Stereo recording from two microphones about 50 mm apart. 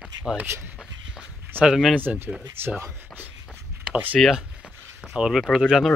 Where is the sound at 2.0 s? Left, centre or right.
Right.